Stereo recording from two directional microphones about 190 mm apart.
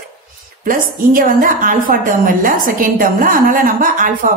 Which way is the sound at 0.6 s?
45° right (ahead or behind).